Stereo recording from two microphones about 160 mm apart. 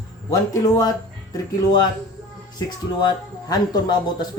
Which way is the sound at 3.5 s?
25° left (ahead or behind).